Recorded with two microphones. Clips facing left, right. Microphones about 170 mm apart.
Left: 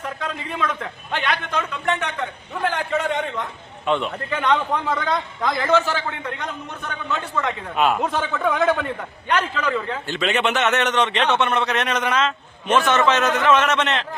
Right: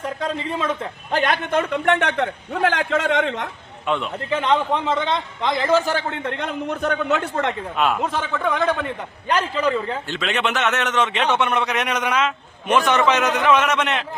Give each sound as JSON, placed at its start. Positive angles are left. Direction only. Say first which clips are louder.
{"t": 0.2, "sound": "a man's voice", "louder": "right 2 dB", "side_deg": -30}
{"t": 1.2, "sound": "a man's voice", "louder": "right 5 dB", "side_deg": -45}
{"t": 3.8, "sound": "a man's voice", "louder": "left 2 dB", "side_deg": 0}
{"t": 4.3, "sound": "a man's voice", "louder": "right 2 dB", "side_deg": -30}
{"t": 6.1, "sound": "a man's voice", "louder": "right 3 dB", "side_deg": -70}
{"t": 7.8, "sound": "a man's voice", "louder": "left 2 dB", "side_deg": 0}
{"t": 9.2, "sound": "a man's voice", "louder": "right 2 dB", "side_deg": -30}
{"t": 10.1, "sound": "a man's voice", "louder": "left 4 dB", "side_deg": 0}